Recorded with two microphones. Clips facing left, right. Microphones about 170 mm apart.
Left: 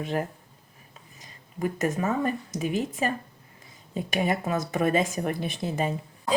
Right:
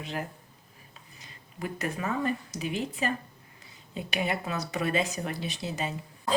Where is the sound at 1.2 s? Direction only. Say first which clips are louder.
Left 7 dB; 45° left (ahead or behind).